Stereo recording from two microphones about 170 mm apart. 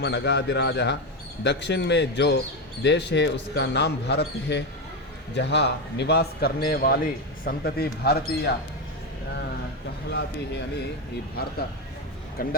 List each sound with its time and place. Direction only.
0.0 s a man's voice: 85° left; by 8.5 s 70° left (ahead or behind)
10.1 s speech: 80° left
12.4 s speech: 55° left (ahead or behind)